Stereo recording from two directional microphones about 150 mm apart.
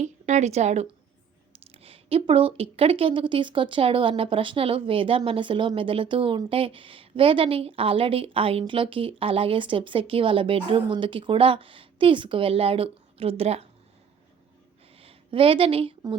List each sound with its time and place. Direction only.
0.0 s a woman's voice: 50° right (ahead or behind)
14.9 s speech: 40° right (ahead or behind)